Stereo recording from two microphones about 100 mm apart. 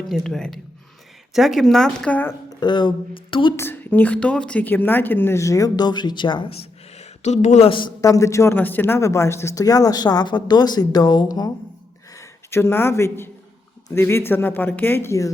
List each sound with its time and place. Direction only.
0.1 s speech: 5° left (ahead or behind)
2.5 s speech: 50° left (ahead or behind)
3.5 s a woman's voice: 20° left (ahead or behind); by 6.5 s 50° left (ahead or behind)
6.5 s a sound: 90° left
7.6 s a man's voice: 55° left (ahead or behind)
8.0 s speech: 35° left (ahead or behind)
12.5 s a woman's voice: 25° left (ahead or behind)